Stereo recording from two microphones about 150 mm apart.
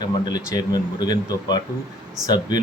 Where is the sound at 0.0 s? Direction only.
25° left (ahead or behind).